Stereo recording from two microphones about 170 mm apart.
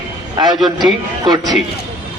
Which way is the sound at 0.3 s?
25° right (ahead or behind).